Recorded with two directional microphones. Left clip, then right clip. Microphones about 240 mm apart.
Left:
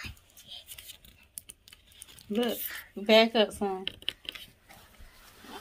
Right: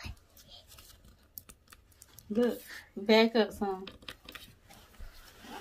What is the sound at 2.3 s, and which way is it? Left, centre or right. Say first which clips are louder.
Speech: even; left.